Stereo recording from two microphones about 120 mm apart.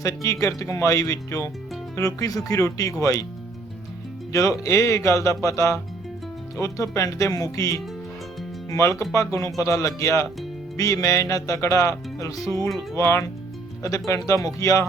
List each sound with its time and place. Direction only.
0.0 s speech: 25° left (ahead or behind)
4.3 s speech: 25° left (ahead or behind)